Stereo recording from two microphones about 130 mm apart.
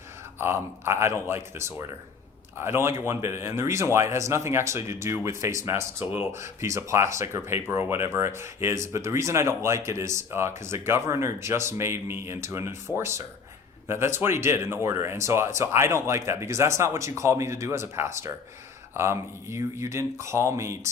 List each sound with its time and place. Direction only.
0.3 s speech: 20° right (ahead or behind)